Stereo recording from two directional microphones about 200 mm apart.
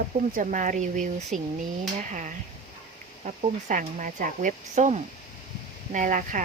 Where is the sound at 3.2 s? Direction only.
40° right (ahead or behind).